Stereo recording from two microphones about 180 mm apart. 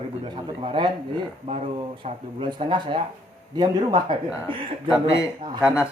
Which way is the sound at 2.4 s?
25° right (ahead or behind).